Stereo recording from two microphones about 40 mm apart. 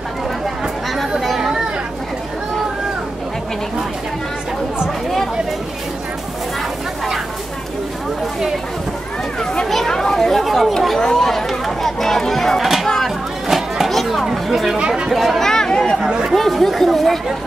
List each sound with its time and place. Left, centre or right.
1.2 s chatter: centre
9.8 s chatter: centre
12.8 s a sound: centre
14.2 s chatter: centre
16.0 s chatter: right
16.3 s chatter: centre
16.8 s speech: centre